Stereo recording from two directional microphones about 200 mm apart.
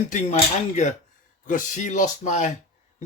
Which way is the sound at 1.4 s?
40° left (ahead or behind).